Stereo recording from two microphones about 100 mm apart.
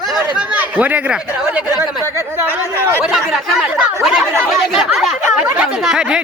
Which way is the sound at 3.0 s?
5° right (ahead or behind).